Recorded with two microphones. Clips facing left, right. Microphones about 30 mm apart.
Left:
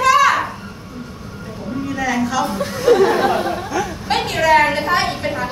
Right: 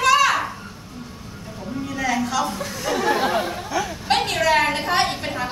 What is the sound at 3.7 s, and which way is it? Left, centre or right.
A woman's voice, centre.